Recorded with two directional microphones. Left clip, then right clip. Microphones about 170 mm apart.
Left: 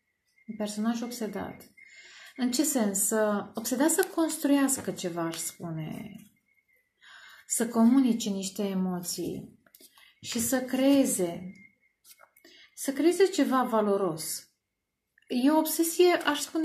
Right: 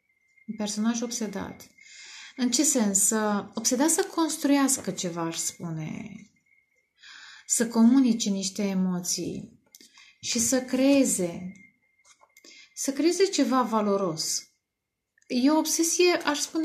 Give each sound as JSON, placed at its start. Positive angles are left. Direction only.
{"t": 0.6, "sound": "a woman's voice", "side_deg": -45}
{"t": 7.5, "sound": "a woman's voice", "side_deg": -45}
{"t": 10.2, "sound": "a woman's voice", "side_deg": -40}
{"t": 12.4, "sound": "speech", "side_deg": -45}
{"t": 15.2, "sound": "a woman's voice", "side_deg": -40}